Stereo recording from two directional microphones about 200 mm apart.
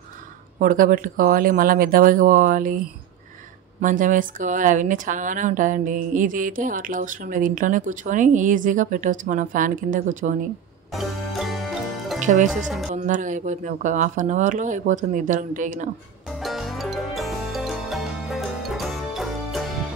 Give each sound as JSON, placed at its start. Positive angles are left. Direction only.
{"t": 0.6, "sound": "speech", "side_deg": -40}
{"t": 3.8, "sound": "a woman's voice", "side_deg": -40}
{"t": 10.9, "sound": "music", "side_deg": 0}
{"t": 12.2, "sound": "speech", "side_deg": -40}
{"t": 12.6, "sound": "a woman's voice", "side_deg": 0}
{"t": 12.9, "sound": "a woman's voice", "side_deg": -40}
{"t": 16.3, "sound": "music", "side_deg": 0}